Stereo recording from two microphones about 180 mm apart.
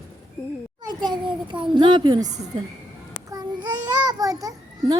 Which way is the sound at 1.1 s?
25° right (ahead or behind).